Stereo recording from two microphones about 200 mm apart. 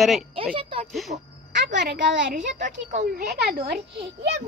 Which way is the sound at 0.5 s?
25° right (ahead or behind).